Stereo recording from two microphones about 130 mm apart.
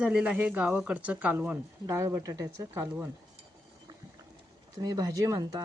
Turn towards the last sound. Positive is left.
turn(degrees=-30)  # may be behind; listen again after turning